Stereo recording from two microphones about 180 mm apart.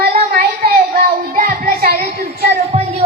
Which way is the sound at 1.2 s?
55° right (ahead or behind).